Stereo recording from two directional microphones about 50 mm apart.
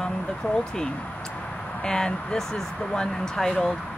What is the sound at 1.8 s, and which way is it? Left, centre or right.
Speech, centre.